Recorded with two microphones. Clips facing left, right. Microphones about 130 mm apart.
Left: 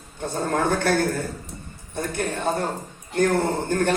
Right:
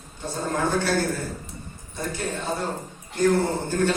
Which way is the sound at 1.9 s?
55° left (ahead or behind).